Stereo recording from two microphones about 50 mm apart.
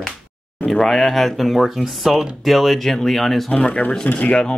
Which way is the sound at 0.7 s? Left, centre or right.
Centre.